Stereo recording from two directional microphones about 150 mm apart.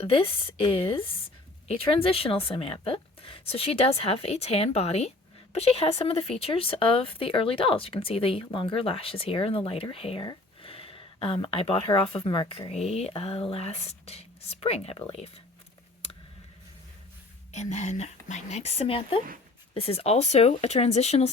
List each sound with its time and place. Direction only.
0.0 s a woman's voice: 40° left (ahead or behind)
17.5 s a woman's voice: 50° left (ahead or behind)